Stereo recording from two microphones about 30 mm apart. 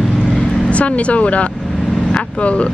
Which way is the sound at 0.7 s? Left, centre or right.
Left.